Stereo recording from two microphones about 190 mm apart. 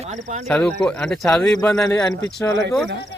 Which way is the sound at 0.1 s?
40° right (ahead or behind).